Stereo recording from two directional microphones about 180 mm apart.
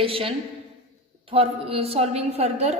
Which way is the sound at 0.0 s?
30° right (ahead or behind).